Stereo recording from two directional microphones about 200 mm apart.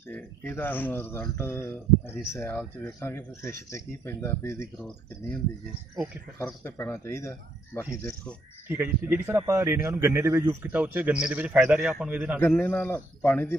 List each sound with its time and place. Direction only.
0.1 s speech: 10° left (ahead or behind)
6.4 s speech: 10° left (ahead or behind)
8.6 s a man's voice: 10° right (ahead or behind)
12.4 s speech: 10° left (ahead or behind)